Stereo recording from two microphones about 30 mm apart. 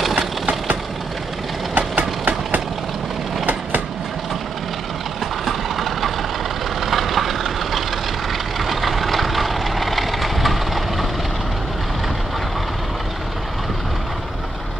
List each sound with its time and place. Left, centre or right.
1.8 s vehicle: right
5.4 s vehicle: centre